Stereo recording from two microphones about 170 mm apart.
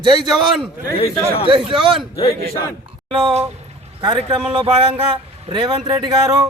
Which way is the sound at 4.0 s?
30° right (ahead or behind).